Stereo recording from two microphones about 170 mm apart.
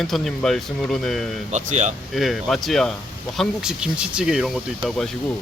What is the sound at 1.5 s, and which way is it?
Speech, 45° right (ahead or behind).